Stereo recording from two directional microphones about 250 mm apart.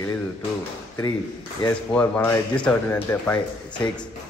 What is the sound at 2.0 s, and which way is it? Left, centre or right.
A man's voice, centre.